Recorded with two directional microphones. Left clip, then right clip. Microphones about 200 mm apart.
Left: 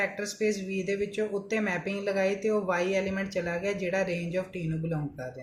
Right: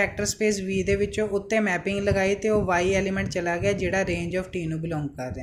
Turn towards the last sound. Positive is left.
turn(degrees=-30)  # may be behind; listen again after turning